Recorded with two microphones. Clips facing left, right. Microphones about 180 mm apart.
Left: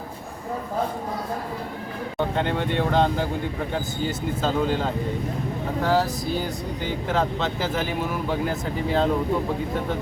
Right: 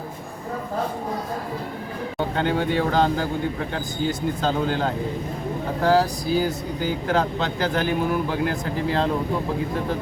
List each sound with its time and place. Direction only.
2.1 s speech: centre (ahead or behind)